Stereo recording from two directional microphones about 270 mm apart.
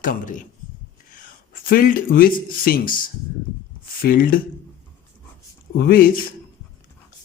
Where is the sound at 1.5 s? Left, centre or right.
Left.